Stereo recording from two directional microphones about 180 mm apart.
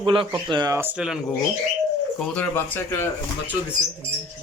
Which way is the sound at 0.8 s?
10° right (ahead or behind).